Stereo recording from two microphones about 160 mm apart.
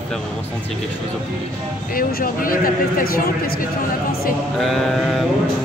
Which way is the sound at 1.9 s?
65° left (ahead or behind).